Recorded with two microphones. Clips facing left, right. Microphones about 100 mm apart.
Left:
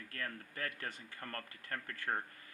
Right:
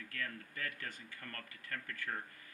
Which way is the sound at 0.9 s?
25° left (ahead or behind).